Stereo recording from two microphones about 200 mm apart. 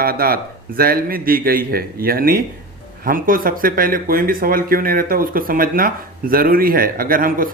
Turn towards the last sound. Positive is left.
turn(degrees=-45)  # may be behind; listen again after turning